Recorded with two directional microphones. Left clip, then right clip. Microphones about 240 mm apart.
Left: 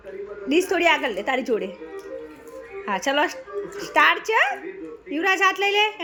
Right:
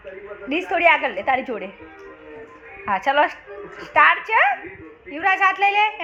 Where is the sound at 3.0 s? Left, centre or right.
Left.